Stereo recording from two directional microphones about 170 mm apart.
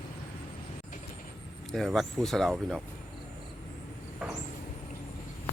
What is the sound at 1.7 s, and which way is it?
Speech, centre (ahead or behind).